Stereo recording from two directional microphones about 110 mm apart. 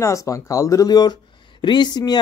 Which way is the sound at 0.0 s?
30° left (ahead or behind).